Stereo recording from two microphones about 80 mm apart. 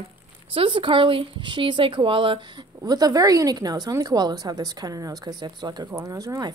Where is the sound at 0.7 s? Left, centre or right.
Right.